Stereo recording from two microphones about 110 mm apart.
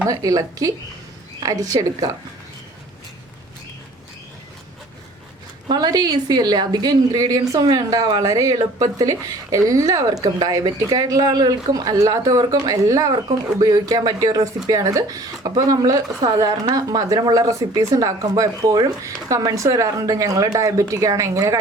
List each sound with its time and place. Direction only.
0.1 s speech: 30° right (ahead or behind)
5.6 s speech: 40° right (ahead or behind)